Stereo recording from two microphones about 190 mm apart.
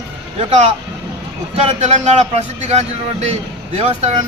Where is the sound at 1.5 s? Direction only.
35° right (ahead or behind).